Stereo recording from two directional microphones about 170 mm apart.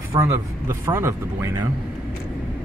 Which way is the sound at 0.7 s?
15° right (ahead or behind).